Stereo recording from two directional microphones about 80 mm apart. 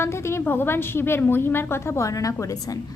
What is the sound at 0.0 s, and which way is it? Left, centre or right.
A woman's voice, left.